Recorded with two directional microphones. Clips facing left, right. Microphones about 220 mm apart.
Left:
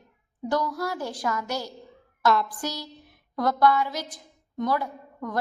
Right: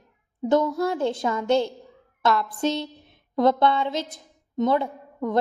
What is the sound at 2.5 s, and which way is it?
A woman's voice, 25° right (ahead or behind).